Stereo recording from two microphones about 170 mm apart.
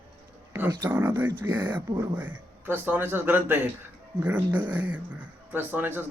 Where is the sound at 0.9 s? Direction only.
10° right (ahead or behind).